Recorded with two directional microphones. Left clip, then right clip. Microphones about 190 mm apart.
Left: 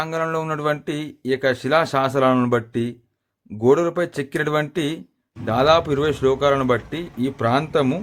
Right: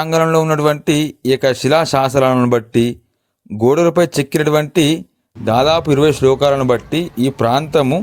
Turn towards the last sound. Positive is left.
turn(degrees=-40)  # may be behind; listen again after turning